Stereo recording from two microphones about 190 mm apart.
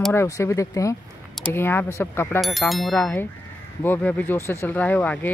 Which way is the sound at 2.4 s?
Centre (ahead or behind).